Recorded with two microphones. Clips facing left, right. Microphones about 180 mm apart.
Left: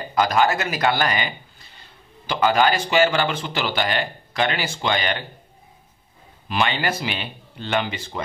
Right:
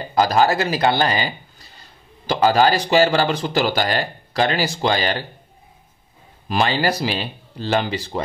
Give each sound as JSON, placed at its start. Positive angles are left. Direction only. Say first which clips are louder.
{"t": 0.1, "sound": "speech", "louder": "right 3 dB", "side_deg": -35}
{"t": 6.5, "sound": "speech", "louder": "right 3 dB", "side_deg": -35}